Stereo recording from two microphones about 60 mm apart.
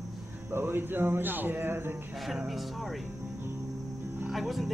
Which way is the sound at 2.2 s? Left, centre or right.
Centre.